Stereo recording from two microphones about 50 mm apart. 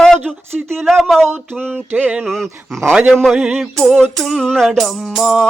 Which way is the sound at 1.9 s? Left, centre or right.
Right.